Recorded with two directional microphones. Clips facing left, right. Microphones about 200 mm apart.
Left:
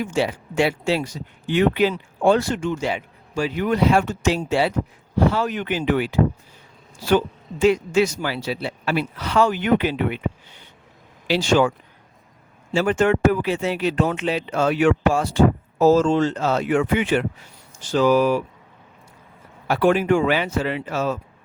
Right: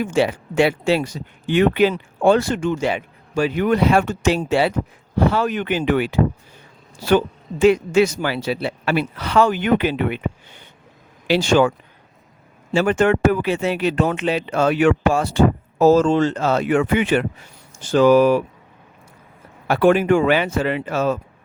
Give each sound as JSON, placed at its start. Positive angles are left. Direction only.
{"t": 0.0, "sound": "speech", "side_deg": -60}
{"t": 7.6, "sound": "speech", "side_deg": -60}
{"t": 12.7, "sound": "speech", "side_deg": -60}
{"t": 19.6, "sound": "speech", "side_deg": -55}